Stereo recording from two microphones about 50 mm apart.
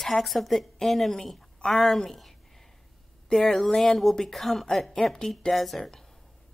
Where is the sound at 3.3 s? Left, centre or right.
Centre.